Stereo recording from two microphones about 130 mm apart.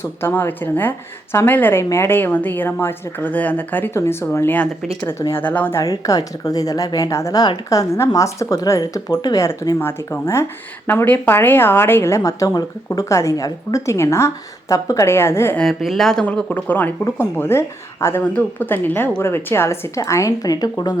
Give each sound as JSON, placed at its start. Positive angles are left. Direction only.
{"t": 0.0, "sound": "a woman's voice", "side_deg": 15}
{"t": 5.8, "sound": "a woman's voice", "side_deg": 30}
{"t": 15.5, "sound": "a woman's voice", "side_deg": 0}